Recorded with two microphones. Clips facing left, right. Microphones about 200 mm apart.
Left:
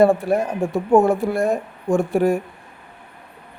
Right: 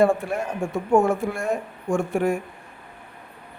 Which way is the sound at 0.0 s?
35° left (ahead or behind).